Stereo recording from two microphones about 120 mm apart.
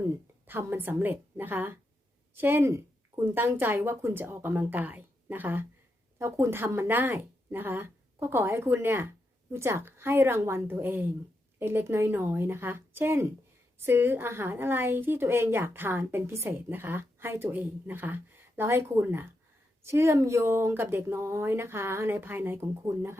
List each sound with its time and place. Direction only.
0.4 s a woman's voice: 20° right (ahead or behind)